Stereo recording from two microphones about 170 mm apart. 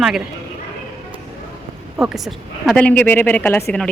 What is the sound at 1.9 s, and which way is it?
A woman's voice, centre (ahead or behind).